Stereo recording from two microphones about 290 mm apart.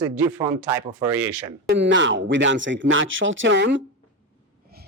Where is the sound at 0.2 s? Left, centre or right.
Centre.